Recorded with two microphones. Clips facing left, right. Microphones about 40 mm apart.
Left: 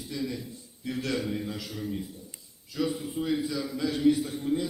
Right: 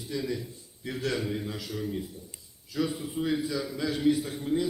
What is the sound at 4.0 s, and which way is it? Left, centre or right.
Speech, centre.